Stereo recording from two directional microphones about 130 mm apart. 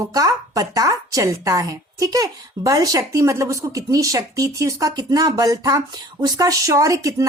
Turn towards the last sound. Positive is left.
turn(degrees=-25)  # may be behind; listen again after turning